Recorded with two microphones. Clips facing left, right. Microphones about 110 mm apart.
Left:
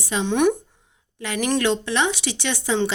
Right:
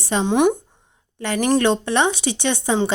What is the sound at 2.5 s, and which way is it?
Speech, 30° right (ahead or behind).